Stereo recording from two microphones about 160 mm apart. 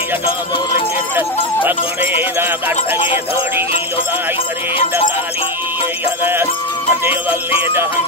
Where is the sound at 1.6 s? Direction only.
10° right (ahead or behind).